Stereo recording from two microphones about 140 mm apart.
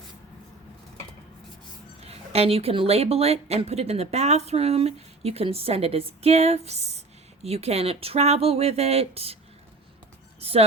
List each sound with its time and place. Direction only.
2.0 s a woman's voice: 45° right (ahead or behind)
10.4 s a woman's voice: 45° right (ahead or behind)